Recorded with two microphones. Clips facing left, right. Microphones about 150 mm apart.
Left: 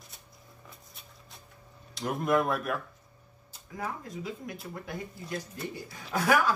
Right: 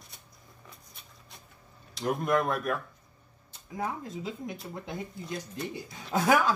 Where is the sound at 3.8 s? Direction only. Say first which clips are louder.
Right 2 dB; 25° right (ahead or behind).